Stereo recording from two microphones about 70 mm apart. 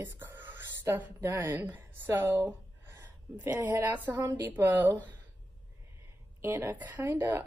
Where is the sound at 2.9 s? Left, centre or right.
Right.